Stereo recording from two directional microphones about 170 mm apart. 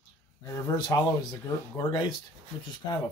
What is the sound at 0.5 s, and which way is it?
Speech, 20° left (ahead or behind).